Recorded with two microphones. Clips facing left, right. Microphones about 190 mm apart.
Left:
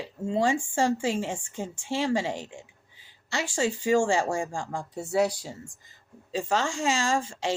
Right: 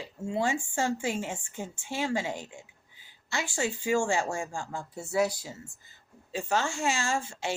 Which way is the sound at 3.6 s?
90° left.